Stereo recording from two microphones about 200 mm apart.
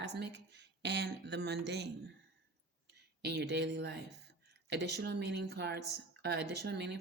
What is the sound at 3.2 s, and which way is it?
Speech, 55° right (ahead or behind).